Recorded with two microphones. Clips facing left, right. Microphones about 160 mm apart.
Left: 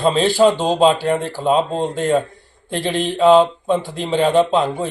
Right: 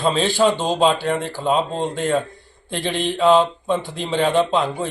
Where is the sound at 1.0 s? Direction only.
5° left (ahead or behind).